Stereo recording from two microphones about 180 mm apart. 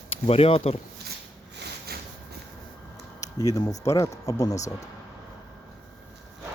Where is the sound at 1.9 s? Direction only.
60° right (ahead or behind).